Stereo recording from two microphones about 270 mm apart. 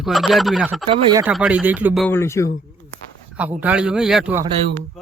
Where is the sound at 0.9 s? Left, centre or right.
Centre.